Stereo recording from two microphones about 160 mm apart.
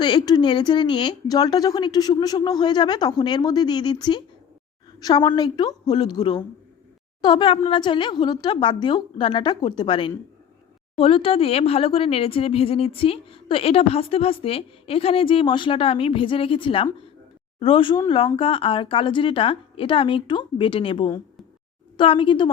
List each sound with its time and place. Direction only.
0.0 s speech: 25° left (ahead or behind)